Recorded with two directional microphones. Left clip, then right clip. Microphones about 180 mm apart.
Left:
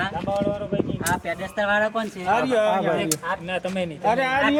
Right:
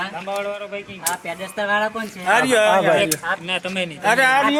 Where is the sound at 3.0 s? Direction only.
50° left (ahead or behind).